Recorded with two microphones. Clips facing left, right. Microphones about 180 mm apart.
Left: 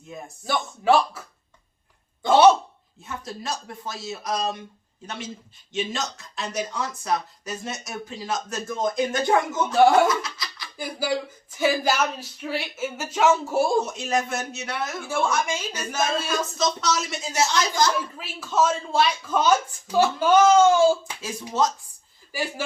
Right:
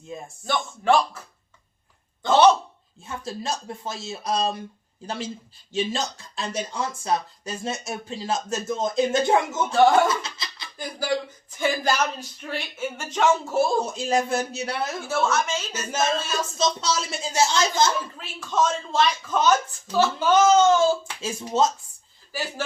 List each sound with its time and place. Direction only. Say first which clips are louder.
0.1 s speech: right 2 dB; 25° right (ahead or behind)
0.4 s speech: left 1 dB; 10° left (ahead or behind)
2.2 s cough: left 1 dB; 10° left (ahead or behind)
3.0 s speech: right 2 dB; 30° right (ahead or behind)
9.7 s speech: left 1 dB; 10° left (ahead or behind)
10.1 s music: left 1 dB; 25° right (ahead or behind)
10.8 s speech: even; 10° left (ahead or behind)
13.8 s speech: right 2 dB; 30° right (ahead or behind)
15.0 s speech: even; 10° left (ahead or behind)
16.6 s speech: right 2 dB; 30° right (ahead or behind)
18.2 s speech: left 1 dB; 5° left (ahead or behind)
21.2 s speech: right 3 dB; 25° right (ahead or behind)
22.3 s speech: left 1 dB; 10° left (ahead or behind)